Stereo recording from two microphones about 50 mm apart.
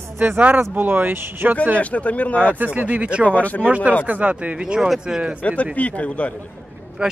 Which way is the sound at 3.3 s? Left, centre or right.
Left.